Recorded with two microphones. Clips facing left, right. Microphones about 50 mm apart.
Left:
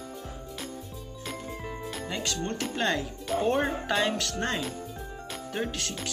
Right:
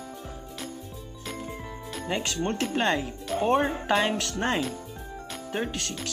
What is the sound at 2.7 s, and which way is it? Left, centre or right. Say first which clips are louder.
Speech: right 3 dB; centre.